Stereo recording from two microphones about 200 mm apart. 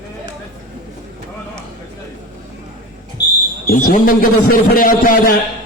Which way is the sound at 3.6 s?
45° left (ahead or behind).